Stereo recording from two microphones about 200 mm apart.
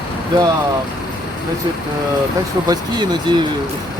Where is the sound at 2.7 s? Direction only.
20° right (ahead or behind).